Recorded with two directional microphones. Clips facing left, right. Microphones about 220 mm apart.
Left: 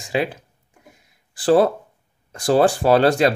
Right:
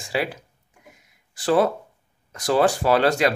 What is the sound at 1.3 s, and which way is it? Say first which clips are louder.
Speech: left 4 dB; 30° left (ahead or behind).